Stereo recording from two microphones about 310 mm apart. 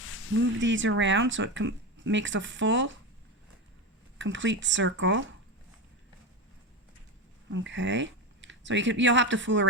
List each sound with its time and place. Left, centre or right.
0.3 s speech: right
4.2 s speech: right
7.5 s speech: right